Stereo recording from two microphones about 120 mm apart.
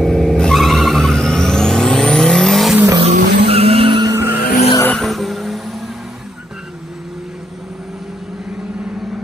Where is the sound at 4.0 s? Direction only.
25° right (ahead or behind).